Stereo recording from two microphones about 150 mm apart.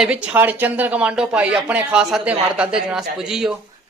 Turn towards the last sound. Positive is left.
turn(degrees=-5)  # may be behind; listen again after turning